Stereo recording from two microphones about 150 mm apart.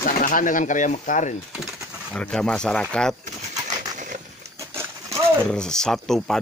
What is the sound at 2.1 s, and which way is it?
Speech, 5° left (ahead or behind).